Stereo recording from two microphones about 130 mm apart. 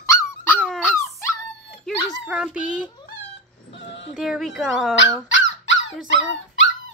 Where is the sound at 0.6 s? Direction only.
5° right (ahead or behind).